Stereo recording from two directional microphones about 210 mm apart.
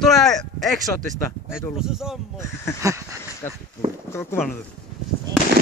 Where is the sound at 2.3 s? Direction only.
15° left (ahead or behind).